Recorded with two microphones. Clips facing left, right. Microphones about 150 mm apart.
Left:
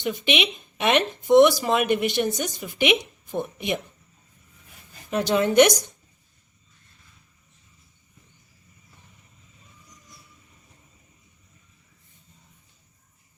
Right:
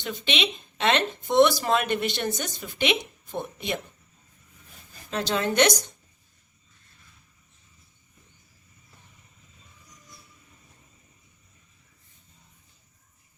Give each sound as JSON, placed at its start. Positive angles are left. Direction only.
{"t": 0.0, "sound": "speech", "side_deg": 15}
{"t": 5.1, "sound": "speech", "side_deg": 20}